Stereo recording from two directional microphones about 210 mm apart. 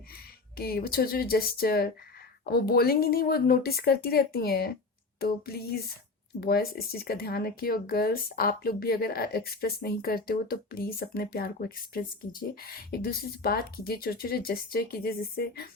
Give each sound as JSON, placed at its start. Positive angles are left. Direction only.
{"t": 0.5, "sound": "speech", "side_deg": 45}